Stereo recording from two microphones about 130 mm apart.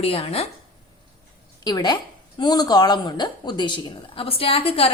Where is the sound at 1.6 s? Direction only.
35° left (ahead or behind).